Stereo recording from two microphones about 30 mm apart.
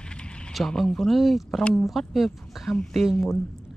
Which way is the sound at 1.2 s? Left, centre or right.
Centre.